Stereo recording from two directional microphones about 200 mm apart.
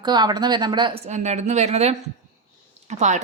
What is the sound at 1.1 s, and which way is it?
Speech, 35° right (ahead or behind).